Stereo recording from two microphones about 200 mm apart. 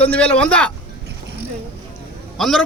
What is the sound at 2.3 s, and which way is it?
Speech, centre (ahead or behind).